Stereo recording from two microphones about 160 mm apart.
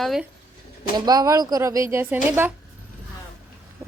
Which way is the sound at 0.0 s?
Centre (ahead or behind).